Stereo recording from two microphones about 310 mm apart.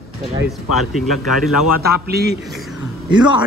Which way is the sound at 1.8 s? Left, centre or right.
Right.